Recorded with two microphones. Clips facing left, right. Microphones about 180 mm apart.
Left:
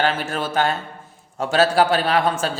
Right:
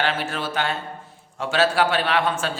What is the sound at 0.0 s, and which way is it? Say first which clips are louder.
A man's voice: left 3 dB; 45° left (ahead or behind).